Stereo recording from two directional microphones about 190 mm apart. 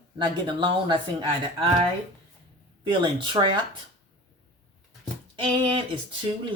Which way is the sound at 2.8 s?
25° right (ahead or behind).